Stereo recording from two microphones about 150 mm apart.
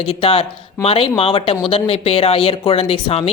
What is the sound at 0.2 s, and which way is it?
Speech, 40° left (ahead or behind).